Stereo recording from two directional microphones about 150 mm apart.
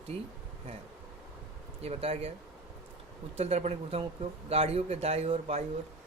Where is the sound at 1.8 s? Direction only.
40° right (ahead or behind).